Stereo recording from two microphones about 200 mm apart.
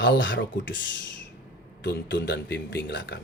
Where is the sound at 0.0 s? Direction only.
65° left (ahead or behind).